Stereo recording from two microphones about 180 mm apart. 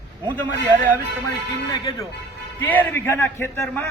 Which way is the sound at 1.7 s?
25° left (ahead or behind).